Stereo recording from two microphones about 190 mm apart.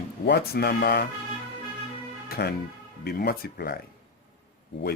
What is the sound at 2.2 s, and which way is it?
Music, 55° left (ahead or behind).